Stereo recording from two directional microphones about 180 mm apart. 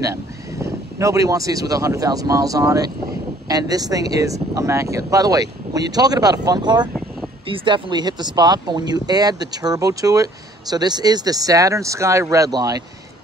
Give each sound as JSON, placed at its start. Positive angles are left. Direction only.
{"t": 0.0, "sound": "speech", "side_deg": -15}